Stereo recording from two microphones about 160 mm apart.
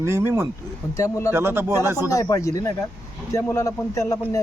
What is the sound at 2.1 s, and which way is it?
A man's voice, 20° left (ahead or behind).